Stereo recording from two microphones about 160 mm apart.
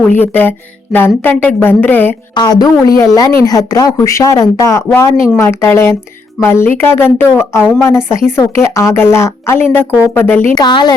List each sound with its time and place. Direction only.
0.1 s a woman's voice: 10° left (ahead or behind)
2.3 s a woman's voice: 25° left (ahead or behind)
10.5 s speech: 25° left (ahead or behind)